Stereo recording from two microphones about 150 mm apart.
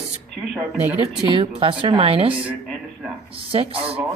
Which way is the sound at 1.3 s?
35° right (ahead or behind).